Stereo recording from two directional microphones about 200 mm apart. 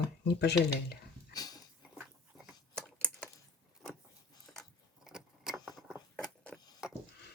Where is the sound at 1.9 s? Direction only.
5° right (ahead or behind).